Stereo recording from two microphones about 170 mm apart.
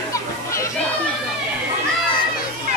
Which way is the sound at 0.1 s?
15° left (ahead or behind).